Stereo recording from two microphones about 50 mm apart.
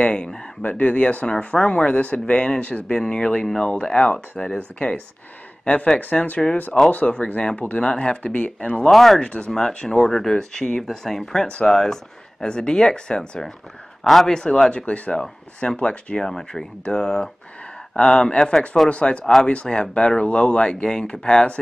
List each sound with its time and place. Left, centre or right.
0.0 s speech: centre
0.6 s speech: left
8.9 s speech: centre
9.2 s speech: left
9.5 s speech: centre